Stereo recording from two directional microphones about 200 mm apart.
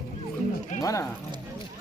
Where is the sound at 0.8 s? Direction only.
15° left (ahead or behind).